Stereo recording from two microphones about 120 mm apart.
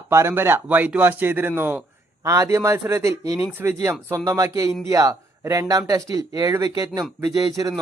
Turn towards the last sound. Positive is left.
turn(degrees=-30)  # may be behind; listen again after turning